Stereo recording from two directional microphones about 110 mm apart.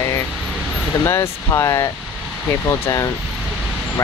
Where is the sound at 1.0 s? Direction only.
25° left (ahead or behind).